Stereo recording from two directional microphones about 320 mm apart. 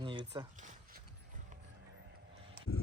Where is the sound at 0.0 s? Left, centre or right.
Centre.